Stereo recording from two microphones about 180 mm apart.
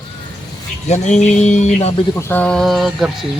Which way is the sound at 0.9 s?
40° left (ahead or behind).